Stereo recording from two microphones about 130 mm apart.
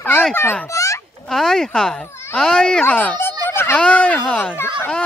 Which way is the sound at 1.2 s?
5° left (ahead or behind).